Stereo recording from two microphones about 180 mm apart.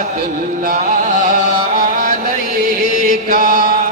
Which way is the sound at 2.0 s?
45° right (ahead or behind).